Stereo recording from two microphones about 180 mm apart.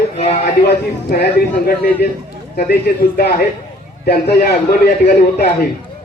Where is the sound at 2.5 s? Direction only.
55° left (ahead or behind).